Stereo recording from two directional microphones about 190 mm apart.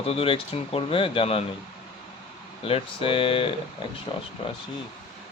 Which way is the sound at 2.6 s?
30° left (ahead or behind).